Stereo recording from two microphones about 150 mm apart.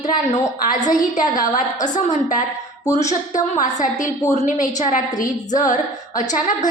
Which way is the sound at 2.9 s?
50° left (ahead or behind).